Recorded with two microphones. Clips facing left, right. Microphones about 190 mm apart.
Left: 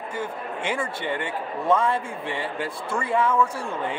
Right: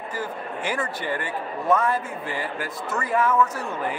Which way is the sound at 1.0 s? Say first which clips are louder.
Even; 25° left (ahead or behind).